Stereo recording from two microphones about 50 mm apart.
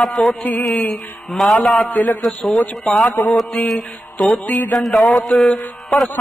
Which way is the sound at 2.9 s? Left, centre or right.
Centre.